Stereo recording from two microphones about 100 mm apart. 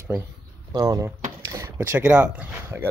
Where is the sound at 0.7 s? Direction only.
35° right (ahead or behind).